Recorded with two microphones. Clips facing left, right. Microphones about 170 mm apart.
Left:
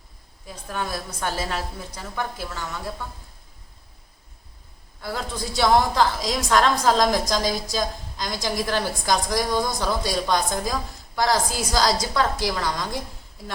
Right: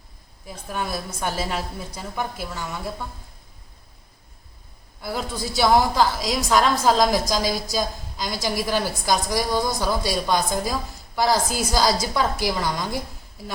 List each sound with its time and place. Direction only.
0.4 s a woman's voice: 10° right (ahead or behind)
4.9 s a woman's voice: 10° right (ahead or behind)